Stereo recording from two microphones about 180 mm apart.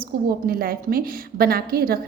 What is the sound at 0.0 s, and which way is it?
A woman's voice, 55° right (ahead or behind).